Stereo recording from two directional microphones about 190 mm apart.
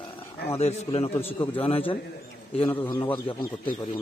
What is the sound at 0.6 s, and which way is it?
A man's voice, 35° left (ahead or behind).